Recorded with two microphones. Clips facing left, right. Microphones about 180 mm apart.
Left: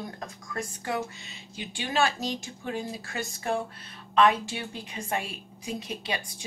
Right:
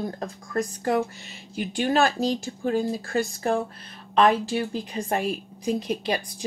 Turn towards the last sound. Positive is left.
turn(degrees=-40)  # may be behind; listen again after turning